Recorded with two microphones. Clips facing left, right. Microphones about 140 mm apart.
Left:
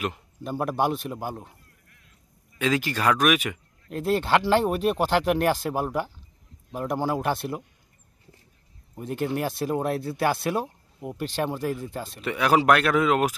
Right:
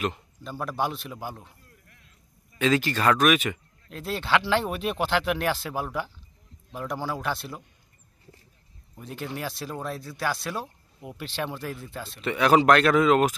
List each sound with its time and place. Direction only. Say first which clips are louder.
0.4 s speech: left 4 dB; 55° left (ahead or behind)
2.6 s speech: right 1 dB; 10° left (ahead or behind)
3.9 s speech: left 4 dB; 50° left (ahead or behind)
9.0 s speech: left 7 dB; 50° left (ahead or behind)
12.2 s speech: right 2 dB; 10° left (ahead or behind)